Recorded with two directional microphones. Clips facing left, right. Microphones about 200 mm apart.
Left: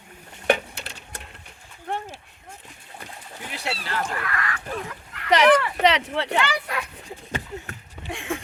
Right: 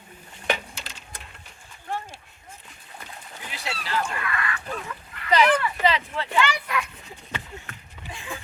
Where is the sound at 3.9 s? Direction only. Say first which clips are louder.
Right 3 dB; 50° left (ahead or behind).